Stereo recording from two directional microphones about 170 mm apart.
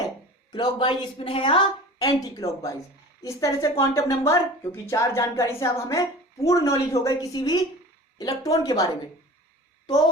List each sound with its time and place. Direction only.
0.5 s speech: 30° left (ahead or behind)